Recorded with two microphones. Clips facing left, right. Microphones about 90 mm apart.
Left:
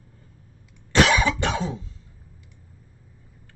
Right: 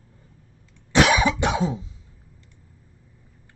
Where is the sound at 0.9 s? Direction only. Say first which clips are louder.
Right 1 dB; 15° right (ahead or behind).